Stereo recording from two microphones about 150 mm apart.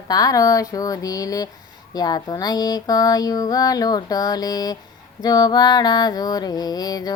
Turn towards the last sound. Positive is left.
turn(degrees=25)  # may be behind; listen again after turning